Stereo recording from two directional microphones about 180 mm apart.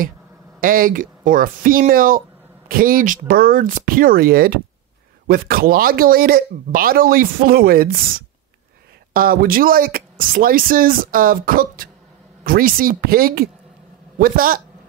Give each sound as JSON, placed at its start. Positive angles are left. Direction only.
{"t": 0.6, "sound": "speech", "side_deg": -50}
{"t": 9.1, "sound": "speech", "side_deg": -55}